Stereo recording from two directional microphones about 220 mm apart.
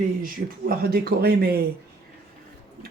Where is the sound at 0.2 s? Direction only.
40° right (ahead or behind).